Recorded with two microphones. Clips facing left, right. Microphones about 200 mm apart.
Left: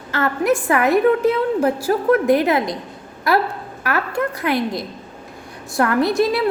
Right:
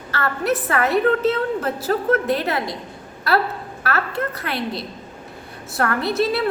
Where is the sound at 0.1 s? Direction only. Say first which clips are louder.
Left 4 dB; 15° left (ahead or behind).